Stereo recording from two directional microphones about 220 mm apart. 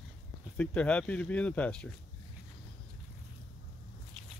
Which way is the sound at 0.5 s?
5° left (ahead or behind).